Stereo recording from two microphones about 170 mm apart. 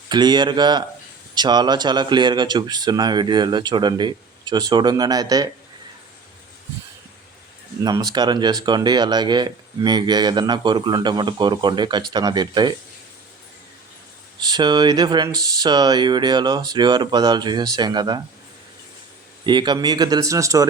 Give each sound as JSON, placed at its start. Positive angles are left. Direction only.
{"t": 0.1, "sound": "speech", "side_deg": -25}
{"t": 7.9, "sound": "speech", "side_deg": -25}
{"t": 14.4, "sound": "speech", "side_deg": -25}
{"t": 19.5, "sound": "speech", "side_deg": -25}